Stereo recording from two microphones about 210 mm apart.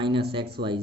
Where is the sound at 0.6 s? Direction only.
50° right (ahead or behind).